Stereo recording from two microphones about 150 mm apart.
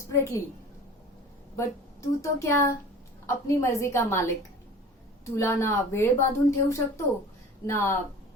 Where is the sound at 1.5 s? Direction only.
20° left (ahead or behind).